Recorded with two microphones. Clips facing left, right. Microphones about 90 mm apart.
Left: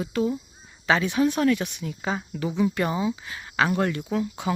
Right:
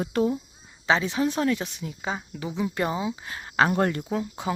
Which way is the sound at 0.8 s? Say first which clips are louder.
Left 1 dB; 20° right (ahead or behind).